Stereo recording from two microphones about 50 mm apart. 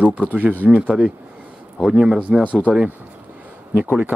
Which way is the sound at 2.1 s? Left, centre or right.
Right.